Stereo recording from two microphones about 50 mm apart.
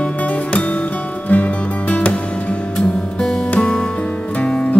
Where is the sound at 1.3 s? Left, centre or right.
Left.